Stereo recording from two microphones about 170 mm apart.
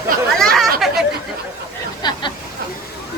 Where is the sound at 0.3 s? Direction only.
Centre (ahead or behind).